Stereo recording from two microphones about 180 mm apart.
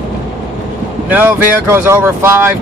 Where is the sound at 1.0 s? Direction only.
10° right (ahead or behind).